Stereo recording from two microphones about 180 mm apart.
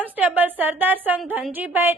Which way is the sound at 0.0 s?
10° right (ahead or behind).